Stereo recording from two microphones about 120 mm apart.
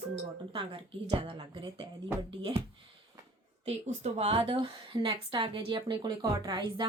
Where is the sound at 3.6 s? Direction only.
60° right (ahead or behind).